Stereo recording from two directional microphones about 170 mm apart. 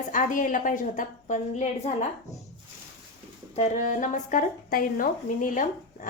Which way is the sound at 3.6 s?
45° left (ahead or behind).